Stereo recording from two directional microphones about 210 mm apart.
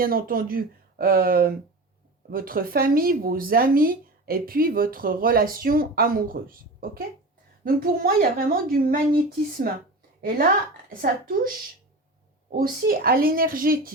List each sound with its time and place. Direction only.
0.0 s speech: 45° right (ahead or behind)
12.5 s speech: 45° right (ahead or behind)